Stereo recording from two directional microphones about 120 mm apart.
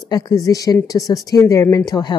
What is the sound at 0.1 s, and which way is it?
Speech, 30° left (ahead or behind).